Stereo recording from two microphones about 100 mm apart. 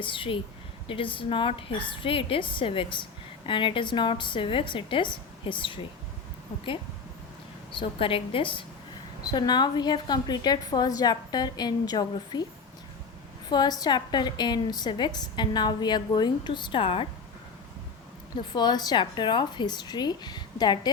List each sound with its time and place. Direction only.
0.0 s a woman's voice: 60° left (ahead or behind)
7.7 s a woman's voice: 60° left (ahead or behind)
9.2 s a woman's voice: 45° left (ahead or behind)
13.5 s a woman's voice: 45° left (ahead or behind); by 17.1 s 65° left (ahead or behind)
18.5 s a woman's voice: 45° left (ahead or behind)